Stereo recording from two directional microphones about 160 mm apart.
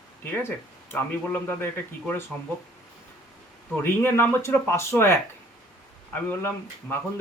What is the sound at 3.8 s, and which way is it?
Speech, 15° left (ahead or behind).